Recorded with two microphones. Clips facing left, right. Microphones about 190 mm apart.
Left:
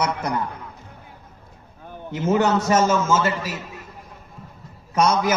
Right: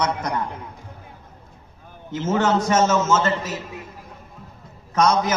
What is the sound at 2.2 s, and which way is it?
A man's voice, 15° left (ahead or behind).